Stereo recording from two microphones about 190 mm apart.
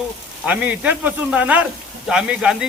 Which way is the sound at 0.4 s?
5° right (ahead or behind).